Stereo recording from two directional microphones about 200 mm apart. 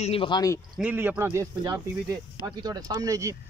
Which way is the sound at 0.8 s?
5° right (ahead or behind).